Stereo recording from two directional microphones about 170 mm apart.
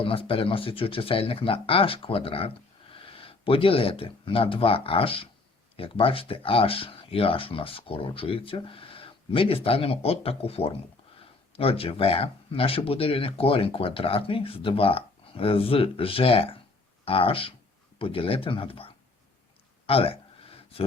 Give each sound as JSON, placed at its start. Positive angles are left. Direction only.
{"t": 0.0, "sound": "speech", "side_deg": 30}
{"t": 19.9, "sound": "speech", "side_deg": 35}